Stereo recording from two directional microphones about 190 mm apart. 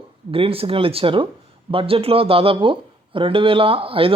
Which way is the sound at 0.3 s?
30° right (ahead or behind).